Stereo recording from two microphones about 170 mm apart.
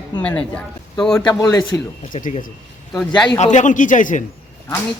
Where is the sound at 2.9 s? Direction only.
5° left (ahead or behind).